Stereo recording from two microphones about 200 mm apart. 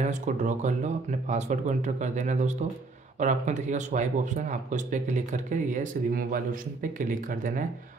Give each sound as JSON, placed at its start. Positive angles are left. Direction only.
{"t": 0.0, "sound": "speech", "side_deg": -35}